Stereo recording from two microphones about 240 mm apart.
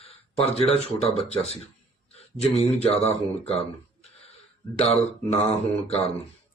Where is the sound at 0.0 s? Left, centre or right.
Left.